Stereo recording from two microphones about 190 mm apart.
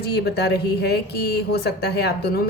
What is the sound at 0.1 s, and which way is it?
A woman's voice, 60° left (ahead or behind).